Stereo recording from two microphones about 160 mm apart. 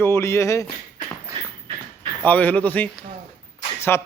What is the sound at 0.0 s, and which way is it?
Speech, 15° left (ahead or behind).